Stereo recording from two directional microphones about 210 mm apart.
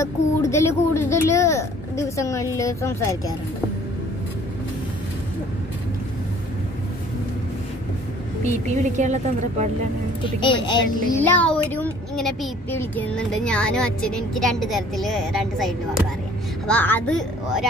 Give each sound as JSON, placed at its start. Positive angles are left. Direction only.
{"t": 0.0, "sound": "a sound", "side_deg": 15}
{"t": 1.1, "sound": "a child's voice", "side_deg": 15}
{"t": 8.5, "sound": "a woman's voice", "side_deg": -35}
{"t": 10.2, "sound": "a woman's voice", "side_deg": 25}
{"t": 11.1, "sound": "speech", "side_deg": 10}